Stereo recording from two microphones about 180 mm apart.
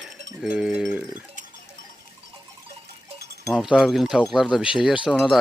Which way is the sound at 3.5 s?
5° right (ahead or behind).